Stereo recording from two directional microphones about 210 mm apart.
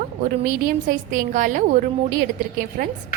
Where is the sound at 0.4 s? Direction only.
40° right (ahead or behind).